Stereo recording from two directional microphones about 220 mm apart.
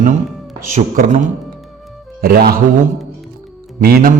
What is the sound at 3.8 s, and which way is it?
Speech, 45° right (ahead or behind).